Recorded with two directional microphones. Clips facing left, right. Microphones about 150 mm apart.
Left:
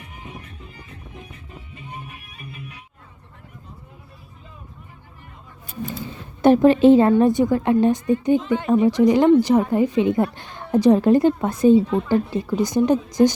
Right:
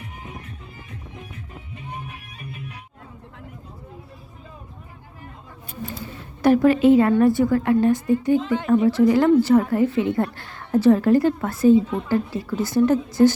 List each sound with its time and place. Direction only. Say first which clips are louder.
6.4 s a woman's voice: left 3 dB; 25° left (ahead or behind)
8.4 s speech: left 1 dB; centre (ahead or behind)
8.9 s a woman's voice: left 2 dB; 20° left (ahead or behind)